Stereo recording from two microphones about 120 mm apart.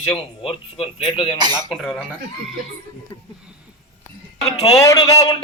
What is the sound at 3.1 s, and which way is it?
Speech, 35° left (ahead or behind).